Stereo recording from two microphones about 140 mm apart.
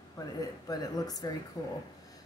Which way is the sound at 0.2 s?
25° left (ahead or behind).